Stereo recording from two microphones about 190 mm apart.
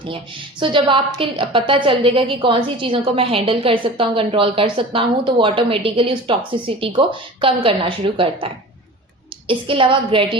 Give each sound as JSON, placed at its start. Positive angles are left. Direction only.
{"t": 0.6, "sound": "a woman's voice", "side_deg": -25}